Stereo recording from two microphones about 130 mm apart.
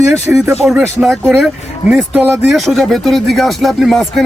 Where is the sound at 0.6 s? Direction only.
5° right (ahead or behind).